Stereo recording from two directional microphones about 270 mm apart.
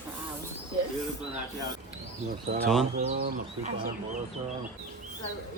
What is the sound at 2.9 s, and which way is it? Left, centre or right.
Speech, right.